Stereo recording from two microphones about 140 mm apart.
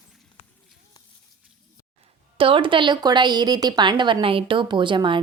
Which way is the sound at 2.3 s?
40° right (ahead or behind).